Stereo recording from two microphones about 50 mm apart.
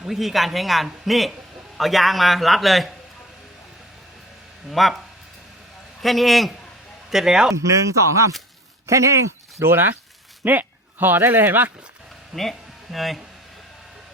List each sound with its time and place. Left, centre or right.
0.1 s a man's voice: centre
4.7 s a man's voice: centre
6.0 s a man's voice: centre
7.1 s a man's voice: centre
7.6 s speech: right
9.6 s a man's voice: right
12.3 s speech: centre